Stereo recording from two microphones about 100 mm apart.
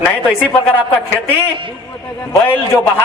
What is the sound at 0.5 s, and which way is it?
A man's voice, 15° left (ahead or behind).